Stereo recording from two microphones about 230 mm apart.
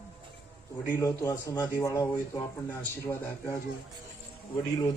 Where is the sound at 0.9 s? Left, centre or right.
Centre.